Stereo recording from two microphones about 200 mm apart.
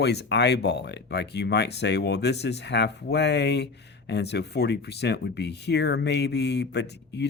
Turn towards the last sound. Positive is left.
turn(degrees=60)  # may be behind; listen again after turning